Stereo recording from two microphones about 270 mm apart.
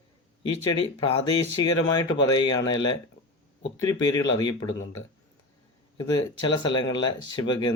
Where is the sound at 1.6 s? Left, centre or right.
Centre.